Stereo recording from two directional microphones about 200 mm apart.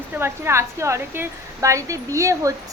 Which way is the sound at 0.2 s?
15° right (ahead or behind).